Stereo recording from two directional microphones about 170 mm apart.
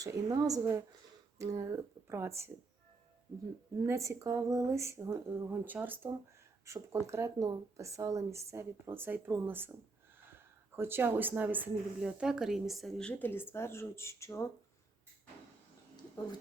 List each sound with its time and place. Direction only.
0.0 s a woman's voice: 20° right (ahead or behind)
3.8 s speech: 20° right (ahead or behind); by 14.4 s 15° left (ahead or behind)